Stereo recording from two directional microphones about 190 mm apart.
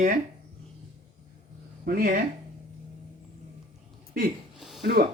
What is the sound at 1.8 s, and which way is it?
Speech, 50° right (ahead or behind).